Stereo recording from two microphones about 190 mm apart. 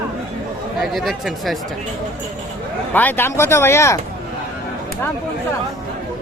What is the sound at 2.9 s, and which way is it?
Speech, 10° left (ahead or behind).